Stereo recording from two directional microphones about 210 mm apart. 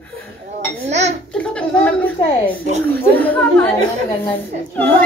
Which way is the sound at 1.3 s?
5° left (ahead or behind).